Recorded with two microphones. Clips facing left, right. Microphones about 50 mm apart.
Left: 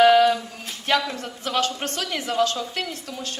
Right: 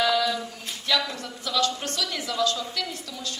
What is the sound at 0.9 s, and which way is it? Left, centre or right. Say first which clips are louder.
A woman's voice: left 4 dB; left.